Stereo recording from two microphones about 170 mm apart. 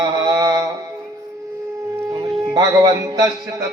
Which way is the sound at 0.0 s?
25° right (ahead or behind).